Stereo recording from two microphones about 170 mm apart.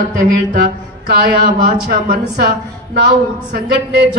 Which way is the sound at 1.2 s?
65° right (ahead or behind).